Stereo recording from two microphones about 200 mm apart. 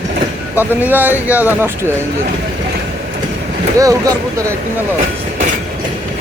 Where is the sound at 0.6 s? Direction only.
10° right (ahead or behind).